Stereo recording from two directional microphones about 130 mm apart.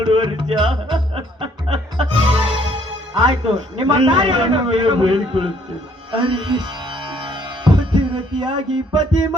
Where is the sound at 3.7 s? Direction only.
35° right (ahead or behind).